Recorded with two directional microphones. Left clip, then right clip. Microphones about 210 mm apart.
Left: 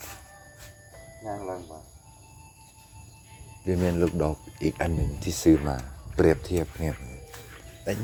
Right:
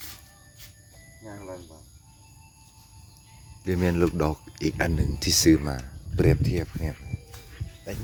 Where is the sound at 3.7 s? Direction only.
15° right (ahead or behind).